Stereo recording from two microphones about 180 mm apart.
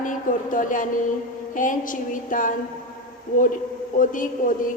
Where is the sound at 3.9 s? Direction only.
50° left (ahead or behind).